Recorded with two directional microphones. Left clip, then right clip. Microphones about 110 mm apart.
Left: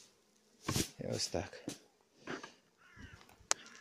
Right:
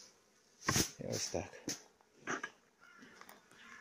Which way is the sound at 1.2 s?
35° left (ahead or behind).